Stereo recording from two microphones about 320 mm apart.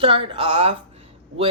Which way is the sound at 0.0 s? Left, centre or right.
Centre.